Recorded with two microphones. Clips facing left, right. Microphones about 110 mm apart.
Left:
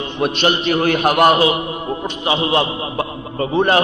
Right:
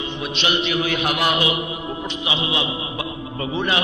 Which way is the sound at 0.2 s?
45° left (ahead or behind).